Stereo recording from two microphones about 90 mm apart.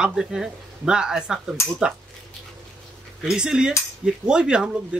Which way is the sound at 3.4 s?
5° right (ahead or behind).